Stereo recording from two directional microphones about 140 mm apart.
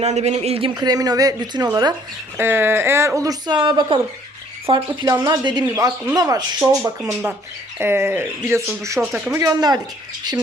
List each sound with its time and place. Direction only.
0.0 s speech: 50° right (ahead or behind)
0.7 s speech: 25° right (ahead or behind)
2.4 s speech: 15° right (ahead or behind)
6.6 s speech: 15° right (ahead or behind)
9.4 s speech: 25° right (ahead or behind)